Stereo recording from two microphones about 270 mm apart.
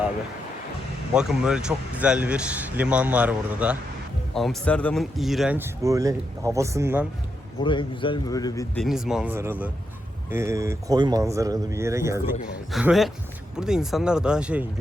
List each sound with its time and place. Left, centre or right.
1.1 s speech: centre
7.6 s a man's voice: centre
8.8 s speech: centre